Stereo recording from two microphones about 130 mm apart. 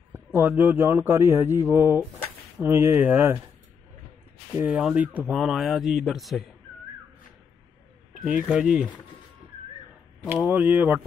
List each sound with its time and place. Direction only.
0.1 s a man's voice: 15° right (ahead or behind)
4.6 s speech: 10° right (ahead or behind)
8.3 s a man's voice: 10° right (ahead or behind)
10.2 s a man's voice: 15° right (ahead or behind)